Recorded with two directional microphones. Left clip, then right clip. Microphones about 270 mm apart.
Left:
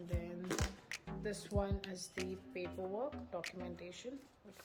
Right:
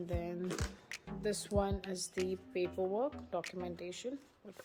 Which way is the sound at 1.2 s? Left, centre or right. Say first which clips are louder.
Right 6 dB; right.